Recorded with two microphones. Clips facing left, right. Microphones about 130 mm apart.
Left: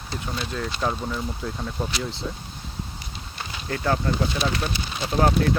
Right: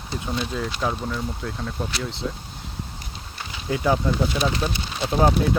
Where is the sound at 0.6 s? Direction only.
Centre (ahead or behind).